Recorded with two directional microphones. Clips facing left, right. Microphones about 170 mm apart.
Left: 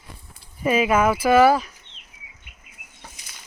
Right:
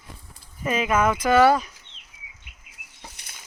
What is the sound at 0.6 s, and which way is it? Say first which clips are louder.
Speech: left 3 dB; 10° left (ahead or behind).